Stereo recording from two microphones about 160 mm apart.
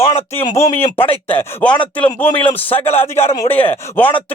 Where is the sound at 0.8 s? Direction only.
35° left (ahead or behind).